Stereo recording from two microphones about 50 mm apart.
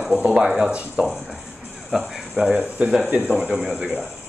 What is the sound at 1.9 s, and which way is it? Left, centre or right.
Speech, centre.